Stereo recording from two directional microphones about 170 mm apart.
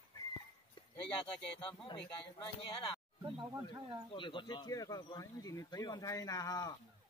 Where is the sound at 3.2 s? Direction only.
30° right (ahead or behind).